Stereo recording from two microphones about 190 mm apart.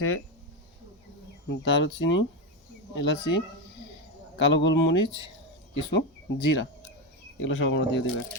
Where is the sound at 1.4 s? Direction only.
70° left (ahead or behind).